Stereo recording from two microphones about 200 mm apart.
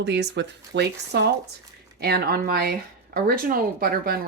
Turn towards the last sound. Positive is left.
turn(degrees=-45)  # may be behind; listen again after turning